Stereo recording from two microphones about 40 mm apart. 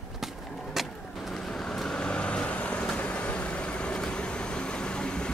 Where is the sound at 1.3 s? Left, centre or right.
Centre.